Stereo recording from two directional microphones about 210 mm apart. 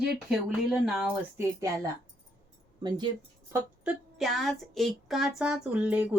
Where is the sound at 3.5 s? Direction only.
5° right (ahead or behind).